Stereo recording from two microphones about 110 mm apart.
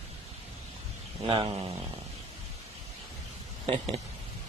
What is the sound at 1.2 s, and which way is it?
Speech, 55° right (ahead or behind).